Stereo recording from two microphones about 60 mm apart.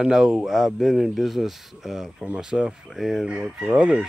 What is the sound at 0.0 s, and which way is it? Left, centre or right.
Speech, centre.